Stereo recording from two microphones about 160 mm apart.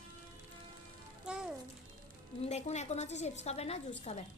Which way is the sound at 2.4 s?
45° left (ahead or behind).